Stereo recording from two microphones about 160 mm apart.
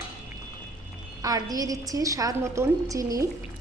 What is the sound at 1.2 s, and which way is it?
A woman's voice, 20° right (ahead or behind).